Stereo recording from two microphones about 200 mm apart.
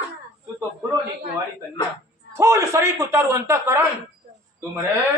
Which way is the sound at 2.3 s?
15° right (ahead or behind).